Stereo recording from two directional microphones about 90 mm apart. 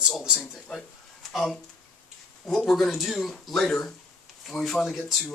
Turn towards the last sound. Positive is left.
turn(degrees=0)  # may be behind; listen again after turning